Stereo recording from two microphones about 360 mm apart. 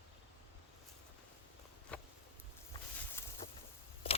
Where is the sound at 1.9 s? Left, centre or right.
Centre.